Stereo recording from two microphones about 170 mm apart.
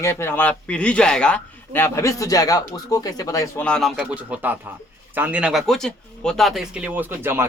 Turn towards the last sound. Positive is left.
turn(degrees=-15)  # may be behind; listen again after turning